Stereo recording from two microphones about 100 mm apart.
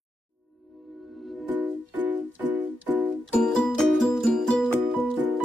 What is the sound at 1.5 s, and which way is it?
Music, 15° right (ahead or behind).